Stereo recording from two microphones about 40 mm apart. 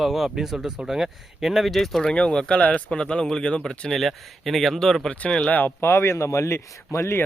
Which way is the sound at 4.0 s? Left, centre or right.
Centre.